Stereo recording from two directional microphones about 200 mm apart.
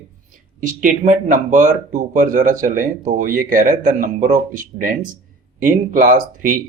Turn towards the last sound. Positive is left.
turn(degrees=-40)  # may be behind; listen again after turning